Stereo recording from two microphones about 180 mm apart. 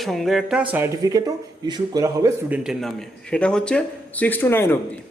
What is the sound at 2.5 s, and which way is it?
A man's voice, 5° right (ahead or behind).